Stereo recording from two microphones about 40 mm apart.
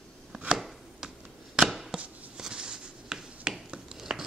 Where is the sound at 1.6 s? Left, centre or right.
Centre.